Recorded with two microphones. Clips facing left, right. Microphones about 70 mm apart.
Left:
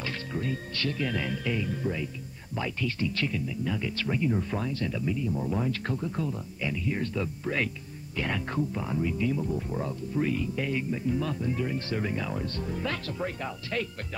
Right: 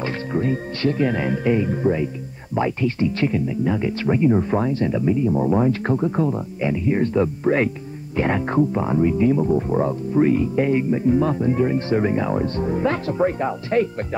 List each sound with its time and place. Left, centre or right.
0.0 s speech: right